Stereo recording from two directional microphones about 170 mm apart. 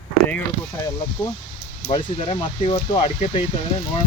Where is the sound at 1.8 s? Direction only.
35° left (ahead or behind).